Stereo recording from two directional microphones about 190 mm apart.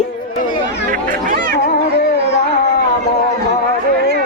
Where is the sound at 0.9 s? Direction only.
45° right (ahead or behind).